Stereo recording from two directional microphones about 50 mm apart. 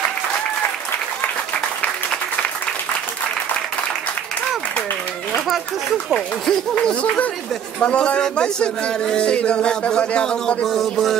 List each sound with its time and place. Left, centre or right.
1.8 s applause: left
6.1 s speech: centre
6.9 s speech: left
10.6 s a man's voice: centre